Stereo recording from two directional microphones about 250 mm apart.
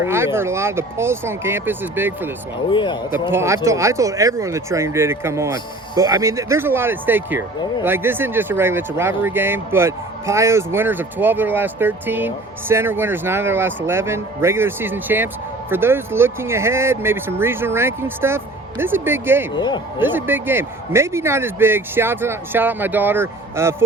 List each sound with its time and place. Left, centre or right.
0.0 s speech: centre
2.7 s speech: centre
3.3 s speech: centre
19.5 s a man's voice: centre
20.0 s speech: centre